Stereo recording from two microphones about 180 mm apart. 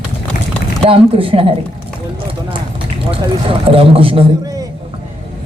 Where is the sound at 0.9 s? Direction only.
30° right (ahead or behind).